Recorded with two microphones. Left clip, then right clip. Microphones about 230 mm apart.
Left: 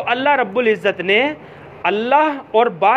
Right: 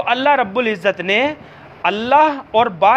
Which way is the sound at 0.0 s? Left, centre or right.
Right.